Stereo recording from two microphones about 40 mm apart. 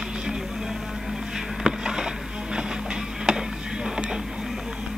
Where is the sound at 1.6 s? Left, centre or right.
Centre.